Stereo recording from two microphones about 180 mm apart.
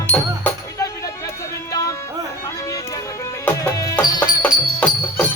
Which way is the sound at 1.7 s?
20° left (ahead or behind).